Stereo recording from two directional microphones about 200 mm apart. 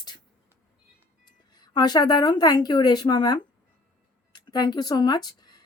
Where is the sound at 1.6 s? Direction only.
20° left (ahead or behind).